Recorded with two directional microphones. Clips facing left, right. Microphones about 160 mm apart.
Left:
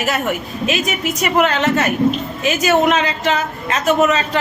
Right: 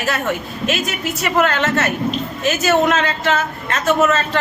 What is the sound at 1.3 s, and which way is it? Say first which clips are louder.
A man's voice: left 1 dB; 10° left (ahead or behind).